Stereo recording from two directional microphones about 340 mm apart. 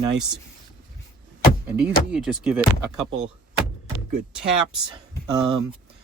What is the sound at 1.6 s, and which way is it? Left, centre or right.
Speech, centre.